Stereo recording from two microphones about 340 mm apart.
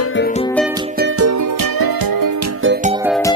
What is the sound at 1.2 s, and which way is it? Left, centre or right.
Music, right.